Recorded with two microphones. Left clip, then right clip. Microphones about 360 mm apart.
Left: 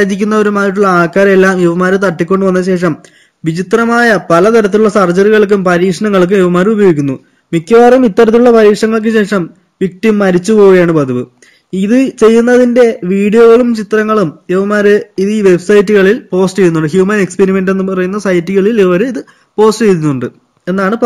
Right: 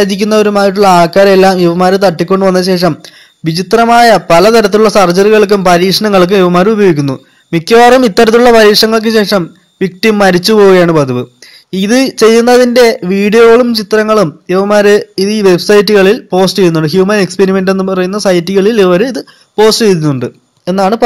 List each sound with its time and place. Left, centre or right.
0.0 s a man's voice: centre
7.7 s speech: right
8.7 s speech: centre
12.5 s a man's voice: right
13.0 s speech: centre